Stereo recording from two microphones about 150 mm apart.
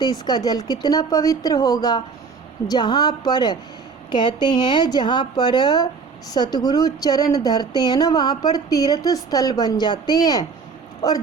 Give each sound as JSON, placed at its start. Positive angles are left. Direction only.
{"t": 0.0, "sound": "speech", "side_deg": 30}